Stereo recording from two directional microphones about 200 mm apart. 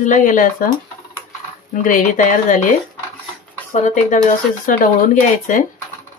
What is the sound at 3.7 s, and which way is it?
Speech, 35° left (ahead or behind).